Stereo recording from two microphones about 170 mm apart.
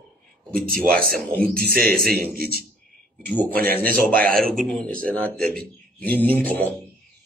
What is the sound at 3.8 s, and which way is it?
Speech, 60° right (ahead or behind).